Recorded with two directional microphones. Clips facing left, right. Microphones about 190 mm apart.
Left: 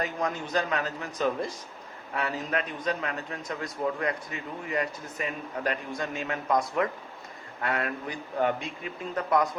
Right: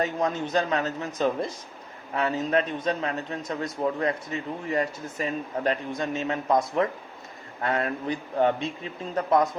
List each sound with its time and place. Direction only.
0.0 s a man's voice: 25° right (ahead or behind)